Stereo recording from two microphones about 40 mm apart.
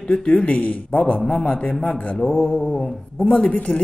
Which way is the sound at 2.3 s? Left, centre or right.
Centre.